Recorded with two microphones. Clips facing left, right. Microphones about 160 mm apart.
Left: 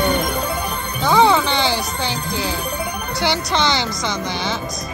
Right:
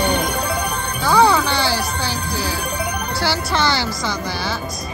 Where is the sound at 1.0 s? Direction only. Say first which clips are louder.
Even; 20° left (ahead or behind).